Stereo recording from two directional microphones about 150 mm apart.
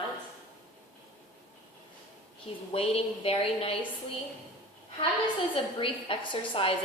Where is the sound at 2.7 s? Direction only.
40° left (ahead or behind).